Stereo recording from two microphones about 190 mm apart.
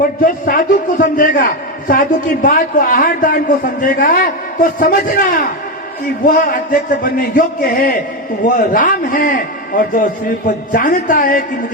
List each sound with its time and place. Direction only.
0.2 s a man's voice: 45° left (ahead or behind)